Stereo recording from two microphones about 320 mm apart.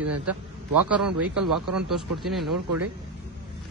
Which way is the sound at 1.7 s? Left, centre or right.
Centre.